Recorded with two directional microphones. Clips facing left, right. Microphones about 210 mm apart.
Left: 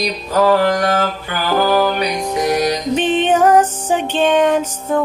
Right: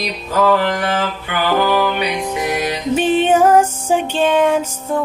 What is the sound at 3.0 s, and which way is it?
Music, 10° right (ahead or behind).